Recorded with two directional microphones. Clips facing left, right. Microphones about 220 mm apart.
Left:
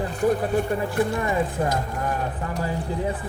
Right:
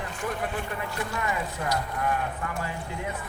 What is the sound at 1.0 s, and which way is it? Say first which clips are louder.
Speech: left 7 dB; 30° left (ahead or behind).